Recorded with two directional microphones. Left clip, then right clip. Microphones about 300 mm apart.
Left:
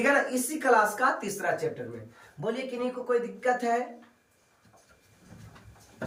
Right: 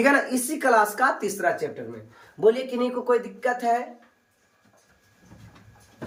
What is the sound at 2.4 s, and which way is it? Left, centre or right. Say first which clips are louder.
Speech: right 11 dB; right.